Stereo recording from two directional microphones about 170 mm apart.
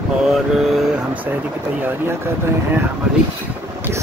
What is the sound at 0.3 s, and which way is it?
Speech, centre (ahead or behind).